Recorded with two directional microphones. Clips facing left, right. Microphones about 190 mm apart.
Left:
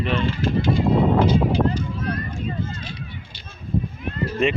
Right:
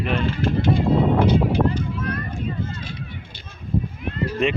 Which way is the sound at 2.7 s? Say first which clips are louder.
Right 1 dB; 50° right (ahead or behind).